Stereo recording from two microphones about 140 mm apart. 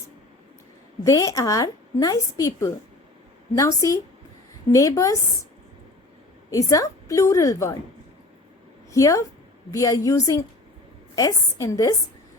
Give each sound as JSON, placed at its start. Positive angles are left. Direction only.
{"t": 1.0, "sound": "a woman's voice", "side_deg": 25}
{"t": 6.5, "sound": "a woman's voice", "side_deg": 25}
{"t": 8.9, "sound": "a woman's voice", "side_deg": 25}